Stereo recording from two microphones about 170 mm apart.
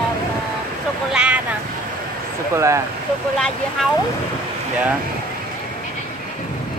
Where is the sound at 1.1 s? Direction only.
5° right (ahead or behind).